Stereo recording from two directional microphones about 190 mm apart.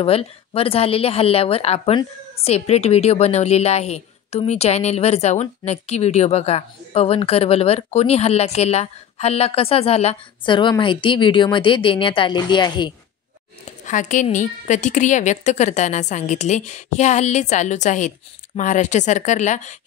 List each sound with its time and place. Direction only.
0.0 s a woman's voice: 30° left (ahead or behind)
13.7 s a woman's voice: 40° left (ahead or behind)